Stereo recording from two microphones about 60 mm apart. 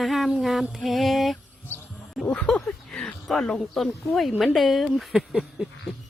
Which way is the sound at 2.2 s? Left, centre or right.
Left.